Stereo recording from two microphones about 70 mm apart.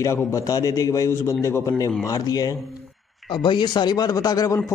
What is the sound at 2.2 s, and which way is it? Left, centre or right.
Speech, left.